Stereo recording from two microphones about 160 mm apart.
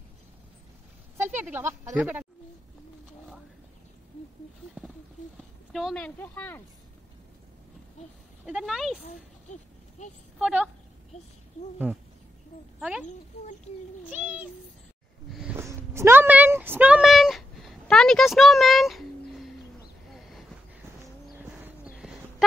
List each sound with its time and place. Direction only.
1.1 s speech: 15° right (ahead or behind)
5.7 s a woman's voice: centre (ahead or behind)
8.5 s speech: centre (ahead or behind)
9.5 s a sound: 50° left (ahead or behind)
10.4 s a woman's voice: 10° right (ahead or behind)
15.5 s a sound: 15° right (ahead or behind)